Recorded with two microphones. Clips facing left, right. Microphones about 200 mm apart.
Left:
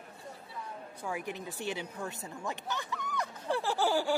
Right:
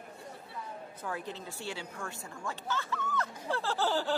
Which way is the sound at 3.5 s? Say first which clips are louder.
Left 2 dB; 15° left (ahead or behind).